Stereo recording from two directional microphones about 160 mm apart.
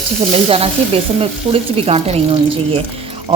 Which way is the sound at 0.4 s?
35° right (ahead or behind).